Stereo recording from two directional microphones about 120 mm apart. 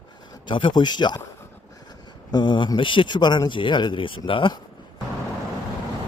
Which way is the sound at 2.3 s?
40° left (ahead or behind).